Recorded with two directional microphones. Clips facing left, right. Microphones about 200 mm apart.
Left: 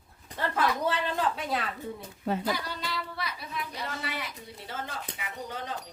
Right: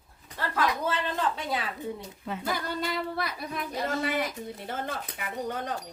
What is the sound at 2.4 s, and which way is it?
Speech, 50° right (ahead or behind).